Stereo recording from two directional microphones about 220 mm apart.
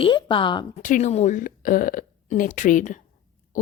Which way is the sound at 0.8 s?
35° left (ahead or behind).